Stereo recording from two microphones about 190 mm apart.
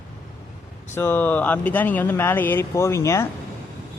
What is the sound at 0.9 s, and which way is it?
Speech, 10° left (ahead or behind).